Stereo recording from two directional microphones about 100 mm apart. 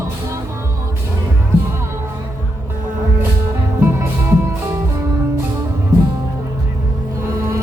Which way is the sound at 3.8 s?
25° right (ahead or behind).